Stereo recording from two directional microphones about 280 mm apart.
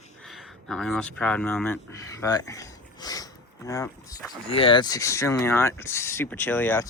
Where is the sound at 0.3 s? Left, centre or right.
Centre.